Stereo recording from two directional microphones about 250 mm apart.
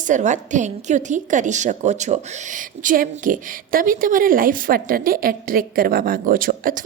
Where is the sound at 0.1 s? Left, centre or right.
Right.